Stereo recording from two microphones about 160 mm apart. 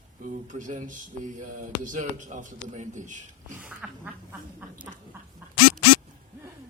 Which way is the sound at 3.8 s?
5° right (ahead or behind).